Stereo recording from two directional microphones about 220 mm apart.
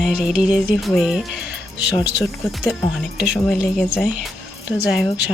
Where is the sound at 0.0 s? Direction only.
Centre (ahead or behind).